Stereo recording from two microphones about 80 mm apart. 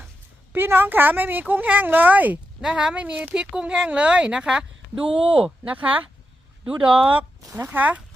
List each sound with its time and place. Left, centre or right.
0.5 s a woman's voice: right
2.6 s a woman's voice: centre